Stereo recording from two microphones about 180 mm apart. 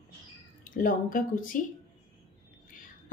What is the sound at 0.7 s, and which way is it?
Speech, 50° left (ahead or behind).